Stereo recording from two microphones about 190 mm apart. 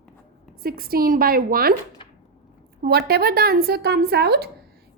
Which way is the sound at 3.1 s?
55° right (ahead or behind).